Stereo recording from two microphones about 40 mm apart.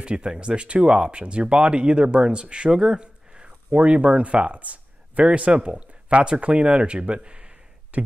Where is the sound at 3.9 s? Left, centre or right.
Right.